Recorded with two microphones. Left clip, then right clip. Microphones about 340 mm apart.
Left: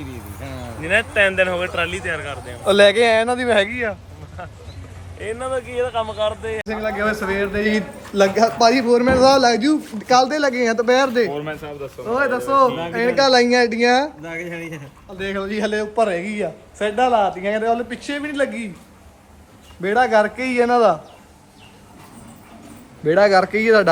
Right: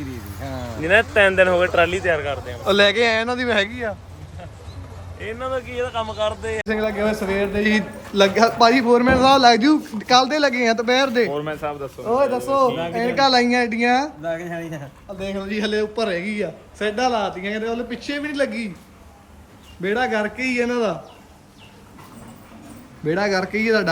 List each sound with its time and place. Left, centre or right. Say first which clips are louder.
0.0 s a sound: right 1 dB; centre
0.8 s speech: right 2 dB; right
2.1 s a man's voice: right 4 dB; centre
5.2 s a man's voice: left 2 dB; centre
19.8 s a man's voice: left 5 dB; centre
23.0 s a man's voice: left 7 dB; centre